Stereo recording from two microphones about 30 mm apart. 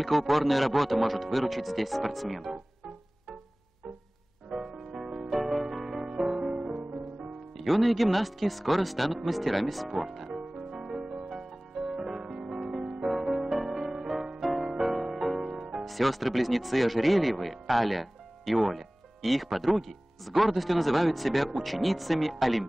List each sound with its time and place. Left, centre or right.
0.0 s speech: centre
4.5 s music: right
5.3 s music: centre
6.2 s music: right
7.5 s speech: centre
10.0 s music: centre
15.5 s music: right
15.8 s speech: centre